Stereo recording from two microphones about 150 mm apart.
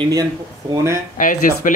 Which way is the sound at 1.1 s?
60° left (ahead or behind).